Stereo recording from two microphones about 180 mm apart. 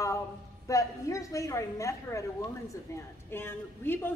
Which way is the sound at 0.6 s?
20° left (ahead or behind).